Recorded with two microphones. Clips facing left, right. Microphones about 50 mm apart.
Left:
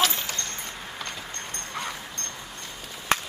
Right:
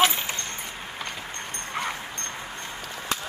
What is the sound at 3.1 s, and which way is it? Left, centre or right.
Run, left.